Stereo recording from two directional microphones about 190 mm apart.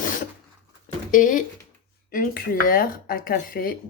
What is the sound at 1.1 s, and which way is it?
Speech, 45° left (ahead or behind).